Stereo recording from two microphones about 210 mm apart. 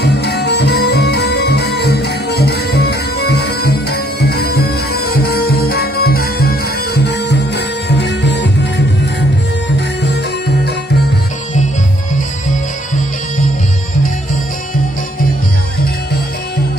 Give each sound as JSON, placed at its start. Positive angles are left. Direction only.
{"t": 0.0, "sound": "music", "side_deg": 50}